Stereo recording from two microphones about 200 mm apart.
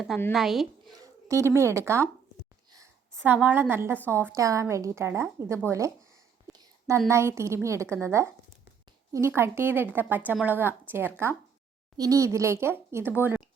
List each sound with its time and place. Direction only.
0.3 s speech: centre (ahead or behind)
0.9 s a woman's voice: 15° right (ahead or behind)
2.7 s a sound: 15° right (ahead or behind)
3.3 s a woman's voice: 10° right (ahead or behind)
6.5 s a sound: 15° right (ahead or behind)
7.1 s a woman's voice: 15° right (ahead or behind)